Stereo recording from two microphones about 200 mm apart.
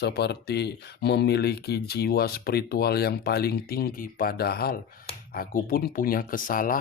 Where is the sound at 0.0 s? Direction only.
55° left (ahead or behind).